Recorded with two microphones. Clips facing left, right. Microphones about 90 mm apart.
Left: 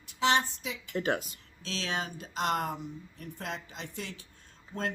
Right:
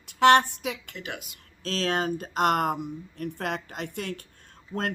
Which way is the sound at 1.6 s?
45° right (ahead or behind).